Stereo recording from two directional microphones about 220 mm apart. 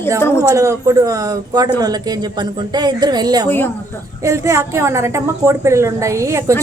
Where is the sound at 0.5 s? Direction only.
15° right (ahead or behind).